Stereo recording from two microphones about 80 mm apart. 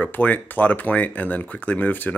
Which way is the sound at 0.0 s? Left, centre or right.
Left.